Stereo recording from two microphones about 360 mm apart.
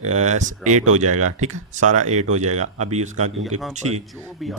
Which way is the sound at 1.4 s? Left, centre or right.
Centre.